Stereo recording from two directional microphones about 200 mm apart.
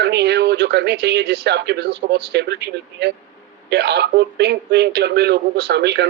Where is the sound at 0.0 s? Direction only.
55° right (ahead or behind).